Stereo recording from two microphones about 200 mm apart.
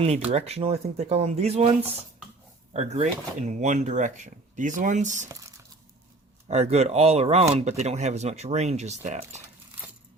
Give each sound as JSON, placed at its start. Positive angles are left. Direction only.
{"t": 0.3, "sound": "speech", "side_deg": -30}
{"t": 2.7, "sound": "speech", "side_deg": -35}
{"t": 5.3, "sound": "speech", "side_deg": -15}
{"t": 6.5, "sound": "speech", "side_deg": -35}